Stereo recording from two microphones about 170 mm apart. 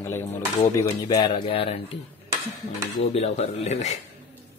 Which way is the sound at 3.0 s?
40° left (ahead or behind).